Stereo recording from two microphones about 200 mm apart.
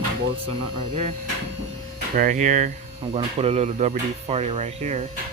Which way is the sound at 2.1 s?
40° right (ahead or behind).